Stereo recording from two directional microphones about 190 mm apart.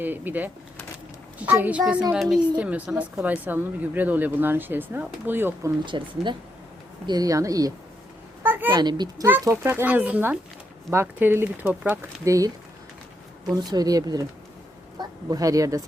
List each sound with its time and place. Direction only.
0.0 s speech: 10° right (ahead or behind)
5.8 s speech: 25° right (ahead or behind)
8.4 s a sound: 10° right (ahead or behind)
8.7 s speech: 20° right (ahead or behind)
13.7 s speech: 20° right (ahead or behind)